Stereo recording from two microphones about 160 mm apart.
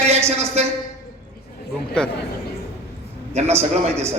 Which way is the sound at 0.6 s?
40° right (ahead or behind).